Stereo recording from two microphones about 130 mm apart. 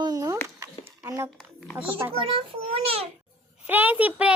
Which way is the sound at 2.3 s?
50° right (ahead or behind).